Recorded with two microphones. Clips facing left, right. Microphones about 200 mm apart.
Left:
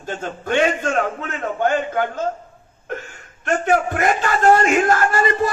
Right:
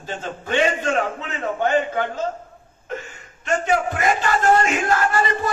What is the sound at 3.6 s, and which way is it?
Speech, 55° left (ahead or behind).